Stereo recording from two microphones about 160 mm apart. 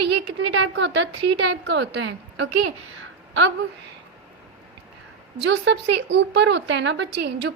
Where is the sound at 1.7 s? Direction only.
90° right.